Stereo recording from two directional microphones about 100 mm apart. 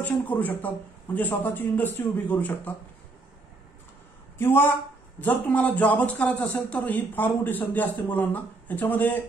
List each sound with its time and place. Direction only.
0.0 s a man's voice: 15° left (ahead or behind)
4.4 s a man's voice: 20° left (ahead or behind)